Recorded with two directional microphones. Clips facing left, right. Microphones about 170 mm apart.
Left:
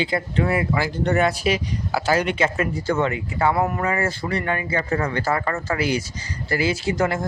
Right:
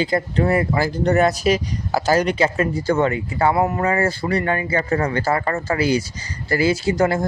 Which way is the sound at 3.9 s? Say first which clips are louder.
Right 4 dB; 35° right (ahead or behind).